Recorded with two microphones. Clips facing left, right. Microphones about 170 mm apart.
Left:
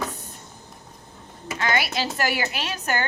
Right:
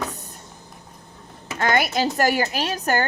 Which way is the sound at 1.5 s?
45° right (ahead or behind).